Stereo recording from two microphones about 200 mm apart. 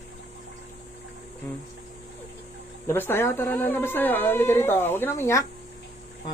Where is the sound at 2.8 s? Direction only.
10° left (ahead or behind).